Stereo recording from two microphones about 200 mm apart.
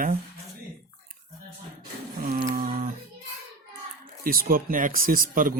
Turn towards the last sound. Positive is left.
turn(degrees=-45)  # may be behind; listen again after turning